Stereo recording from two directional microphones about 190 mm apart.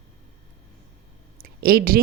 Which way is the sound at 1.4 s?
55° right (ahead or behind).